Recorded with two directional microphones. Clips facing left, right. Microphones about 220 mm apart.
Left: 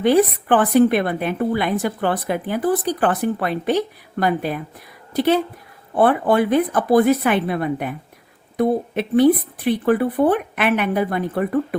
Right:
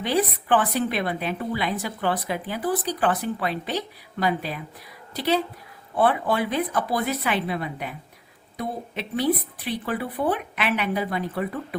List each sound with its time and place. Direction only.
0.0 s a woman's voice: 50° left (ahead or behind)